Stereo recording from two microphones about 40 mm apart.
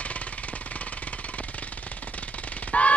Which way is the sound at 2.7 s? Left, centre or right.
Left.